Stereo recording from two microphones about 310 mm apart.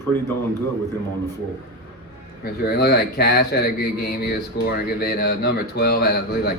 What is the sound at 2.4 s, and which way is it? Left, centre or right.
A man's voice, left.